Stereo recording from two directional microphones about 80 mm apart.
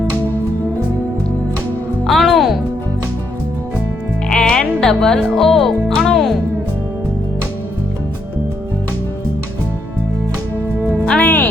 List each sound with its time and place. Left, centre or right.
2.0 s music: centre
4.3 s music: centre
11.0 s music: centre